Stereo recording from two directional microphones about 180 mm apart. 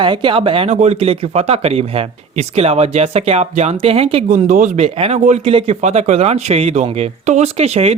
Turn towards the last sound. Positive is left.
turn(degrees=-35)  # may be behind; listen again after turning